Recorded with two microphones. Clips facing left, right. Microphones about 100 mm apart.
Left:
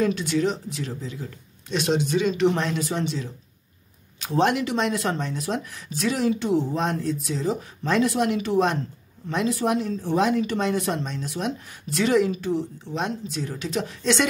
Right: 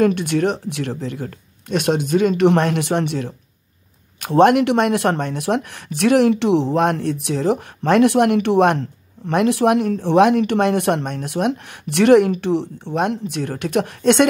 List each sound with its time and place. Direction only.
0.0 s speech: 60° right (ahead or behind)